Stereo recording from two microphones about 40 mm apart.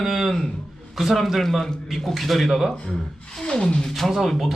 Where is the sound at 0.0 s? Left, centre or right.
Centre.